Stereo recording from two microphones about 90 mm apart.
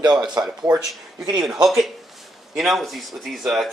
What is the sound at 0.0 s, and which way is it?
Speech, 50° right (ahead or behind).